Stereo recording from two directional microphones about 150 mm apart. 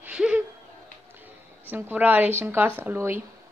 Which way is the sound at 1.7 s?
10° right (ahead or behind).